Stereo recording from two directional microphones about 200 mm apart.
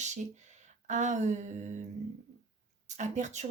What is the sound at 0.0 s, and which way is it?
Speech, 35° right (ahead or behind).